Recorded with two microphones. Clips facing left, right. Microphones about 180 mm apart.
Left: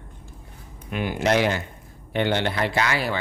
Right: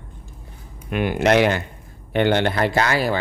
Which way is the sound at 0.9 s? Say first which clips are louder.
Right 4 dB; 65° right (ahead or behind).